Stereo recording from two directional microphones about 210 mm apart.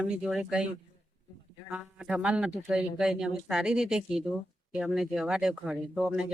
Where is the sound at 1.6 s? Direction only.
5° right (ahead or behind).